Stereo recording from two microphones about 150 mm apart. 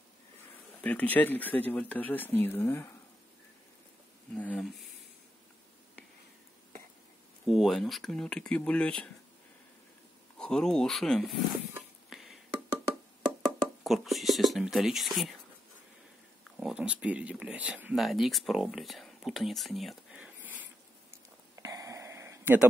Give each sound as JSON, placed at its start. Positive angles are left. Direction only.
{"t": 0.8, "sound": "speech", "side_deg": 10}
{"t": 4.4, "sound": "speech", "side_deg": 5}
{"t": 7.4, "sound": "speech", "side_deg": 0}
{"t": 10.3, "sound": "speech", "side_deg": 5}
{"t": 12.1, "sound": "a sound", "side_deg": 0}
{"t": 13.8, "sound": "speech", "side_deg": 0}
{"t": 16.5, "sound": "speech", "side_deg": -5}
{"t": 21.5, "sound": "a sound", "side_deg": -20}